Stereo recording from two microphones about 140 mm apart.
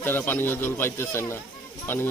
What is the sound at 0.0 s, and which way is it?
Speech, 15° left (ahead or behind).